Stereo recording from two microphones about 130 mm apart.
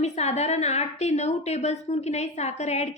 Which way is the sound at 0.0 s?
60° left (ahead or behind).